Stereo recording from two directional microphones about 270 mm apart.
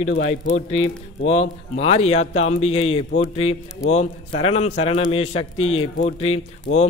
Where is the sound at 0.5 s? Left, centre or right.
Left.